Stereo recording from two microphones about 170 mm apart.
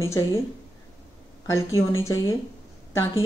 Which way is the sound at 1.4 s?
15° left (ahead or behind).